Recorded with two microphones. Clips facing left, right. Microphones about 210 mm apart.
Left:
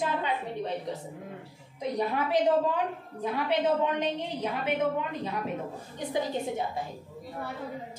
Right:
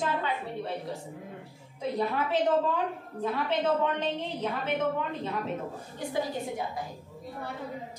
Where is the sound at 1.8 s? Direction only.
15° left (ahead or behind).